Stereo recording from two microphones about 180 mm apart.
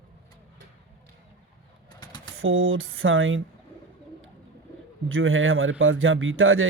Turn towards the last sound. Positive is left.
turn(degrees=-90)